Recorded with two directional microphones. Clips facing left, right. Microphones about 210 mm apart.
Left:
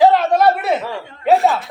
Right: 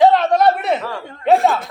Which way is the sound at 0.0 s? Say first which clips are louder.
Even; centre (ahead or behind).